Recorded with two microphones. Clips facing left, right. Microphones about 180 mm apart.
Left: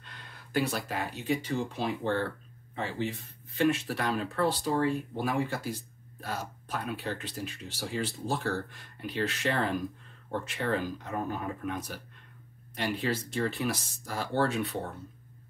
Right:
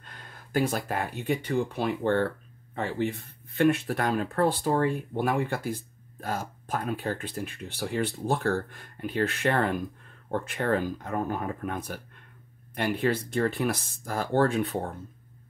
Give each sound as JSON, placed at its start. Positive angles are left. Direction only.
{"t": 0.0, "sound": "speech", "side_deg": -45}